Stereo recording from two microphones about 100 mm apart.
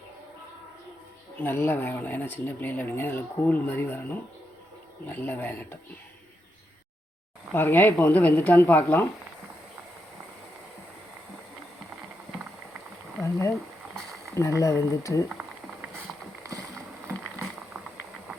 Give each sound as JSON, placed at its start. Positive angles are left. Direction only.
{"t": 1.4, "sound": "speech", "side_deg": 20}
{"t": 7.5, "sound": "speech", "side_deg": 20}
{"t": 14.3, "sound": "speech", "side_deg": 30}
{"t": 15.3, "sound": "a sound", "side_deg": -15}